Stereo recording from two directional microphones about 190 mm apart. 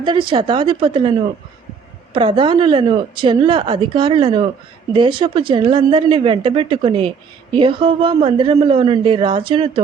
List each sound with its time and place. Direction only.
0.0 s speech: 25° right (ahead or behind)
2.1 s speech: 25° right (ahead or behind)